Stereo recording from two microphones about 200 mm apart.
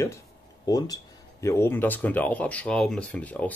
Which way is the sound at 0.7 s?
20° left (ahead or behind).